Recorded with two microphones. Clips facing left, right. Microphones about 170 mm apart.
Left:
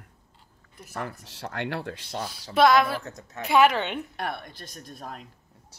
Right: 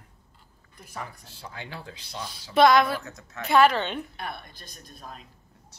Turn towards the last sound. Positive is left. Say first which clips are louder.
# left 4 dB
turn(degrees=65)  # may be behind; listen again after turning